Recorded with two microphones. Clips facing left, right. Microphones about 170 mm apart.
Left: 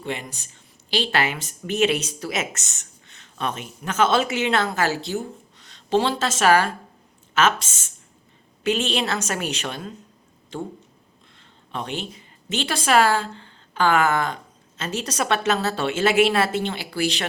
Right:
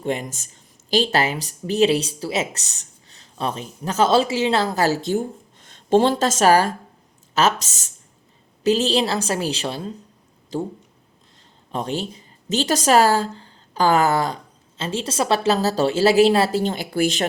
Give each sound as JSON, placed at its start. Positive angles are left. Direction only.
{"t": 0.0, "sound": "speech", "side_deg": -45}
{"t": 11.7, "sound": "a woman's voice", "side_deg": -40}